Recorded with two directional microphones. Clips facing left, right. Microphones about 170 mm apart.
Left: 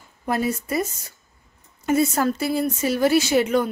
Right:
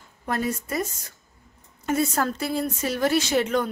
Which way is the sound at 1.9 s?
5° left (ahead or behind).